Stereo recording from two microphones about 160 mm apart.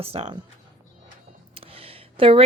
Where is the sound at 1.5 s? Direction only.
35° right (ahead or behind).